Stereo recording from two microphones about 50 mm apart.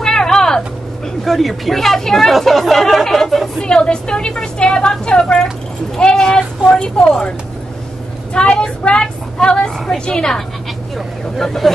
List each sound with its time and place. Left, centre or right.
0.0 s vehicle: centre
1.2 s speech: centre
3.6 s a woman's voice: centre